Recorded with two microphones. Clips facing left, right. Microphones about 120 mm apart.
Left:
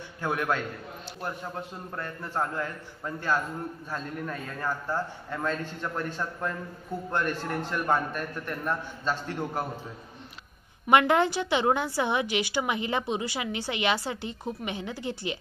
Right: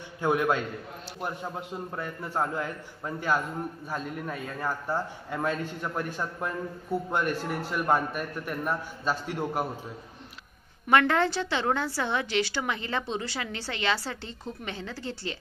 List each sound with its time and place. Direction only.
0.2 s a man's voice: 15° right (ahead or behind)
1.9 s a man's voice: 10° right (ahead or behind)
10.9 s a woman's voice: 15° left (ahead or behind)